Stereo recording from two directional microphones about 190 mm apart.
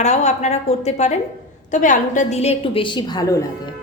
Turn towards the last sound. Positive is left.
turn(degrees=20)  # may be behind; listen again after turning